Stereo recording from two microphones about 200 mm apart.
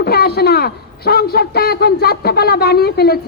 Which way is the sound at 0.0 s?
50° left (ahead or behind).